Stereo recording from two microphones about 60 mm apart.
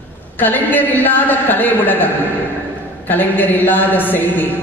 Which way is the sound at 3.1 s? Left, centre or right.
Left.